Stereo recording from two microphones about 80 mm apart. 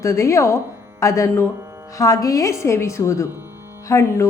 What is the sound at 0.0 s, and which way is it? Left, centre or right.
A woman's voice, left.